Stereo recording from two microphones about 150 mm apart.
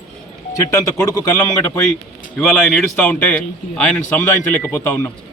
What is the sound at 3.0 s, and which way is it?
Speech, 15° left (ahead or behind).